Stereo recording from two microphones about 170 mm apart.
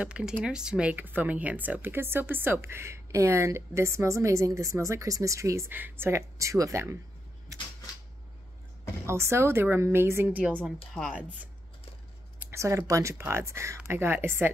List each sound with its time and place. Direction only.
0.0 s speech: 5° right (ahead or behind)
9.0 s speech: 15° right (ahead or behind)
11.0 s speech: 5° left (ahead or behind)
12.4 s speech: 15° right (ahead or behind)